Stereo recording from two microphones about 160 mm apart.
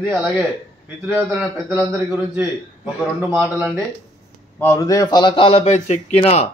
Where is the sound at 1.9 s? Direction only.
15° right (ahead or behind).